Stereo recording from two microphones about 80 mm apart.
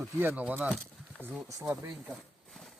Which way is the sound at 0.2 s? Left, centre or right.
Right.